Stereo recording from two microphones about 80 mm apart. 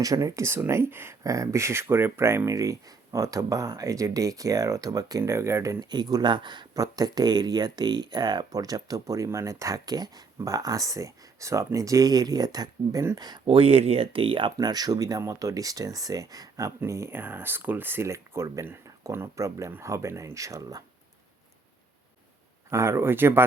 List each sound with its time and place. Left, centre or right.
0.0 s speech: right
1.2 s speech: right
5.2 s speech: right
5.8 s speech: right
6.3 s speech: right
6.7 s speech: right
14.1 s speech: right
14.5 s speech: right
22.7 s speech: right